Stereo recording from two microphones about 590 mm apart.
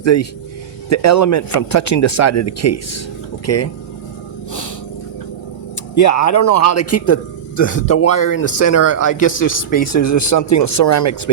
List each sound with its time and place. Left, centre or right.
0.0 s speech: left
5.9 s speech: left; by 7.9 s centre
7.9 s a man's voice: left